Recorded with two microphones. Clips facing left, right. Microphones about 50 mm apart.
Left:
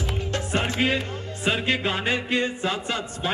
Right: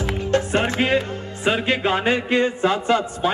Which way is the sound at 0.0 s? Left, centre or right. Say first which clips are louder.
Right 8 dB; right.